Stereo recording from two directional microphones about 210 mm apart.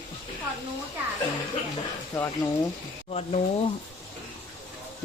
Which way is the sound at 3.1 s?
30° left (ahead or behind).